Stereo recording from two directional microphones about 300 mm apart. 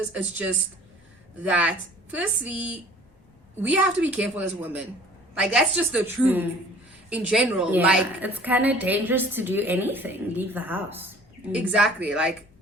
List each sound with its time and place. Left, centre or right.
0.1 s a woman's voice: centre